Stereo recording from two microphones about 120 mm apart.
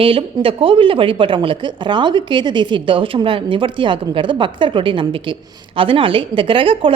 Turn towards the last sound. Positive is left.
turn(degrees=-45)  # may be behind; listen again after turning